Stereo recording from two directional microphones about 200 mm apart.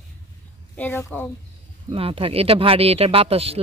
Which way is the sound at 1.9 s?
30° right (ahead or behind).